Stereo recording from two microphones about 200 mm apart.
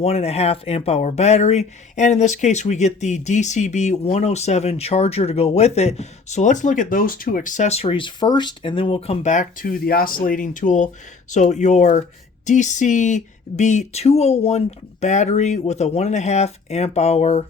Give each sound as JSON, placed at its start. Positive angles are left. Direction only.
{"t": 0.0, "sound": "speech", "side_deg": 30}